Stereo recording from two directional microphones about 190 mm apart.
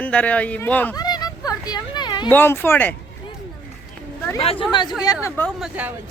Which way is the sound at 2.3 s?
10° left (ahead or behind).